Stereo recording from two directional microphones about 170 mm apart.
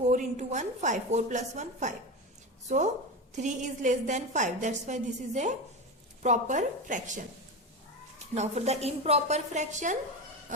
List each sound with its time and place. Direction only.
0.0 s a woman's voice: 45° right (ahead or behind)
8.4 s a woman's voice: 40° right (ahead or behind)